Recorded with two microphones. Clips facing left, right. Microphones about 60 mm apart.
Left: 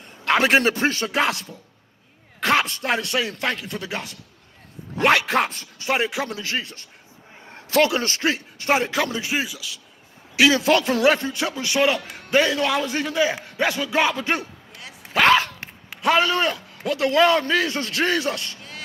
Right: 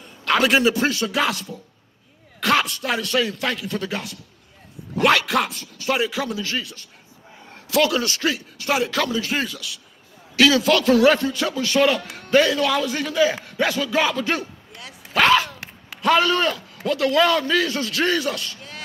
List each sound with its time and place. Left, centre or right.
0.2 s a man's voice: left
5.0 s speech: left
8.0 s speech: left
9.2 s speech: centre
10.3 s a man's voice: centre
16.0 s a man's voice: centre